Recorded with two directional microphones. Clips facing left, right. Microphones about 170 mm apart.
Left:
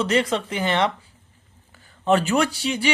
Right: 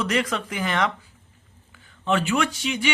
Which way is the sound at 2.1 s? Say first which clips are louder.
Left 3 dB; 40° left (ahead or behind).